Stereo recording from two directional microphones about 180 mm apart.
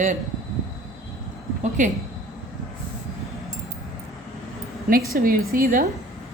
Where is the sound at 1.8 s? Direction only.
45° right (ahead or behind).